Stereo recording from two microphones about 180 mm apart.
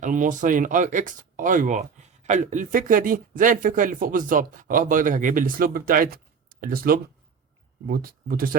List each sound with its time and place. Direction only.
0.0 s speech: 45° right (ahead or behind)